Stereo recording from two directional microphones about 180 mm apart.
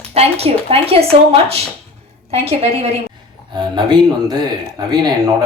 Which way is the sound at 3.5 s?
20° right (ahead or behind).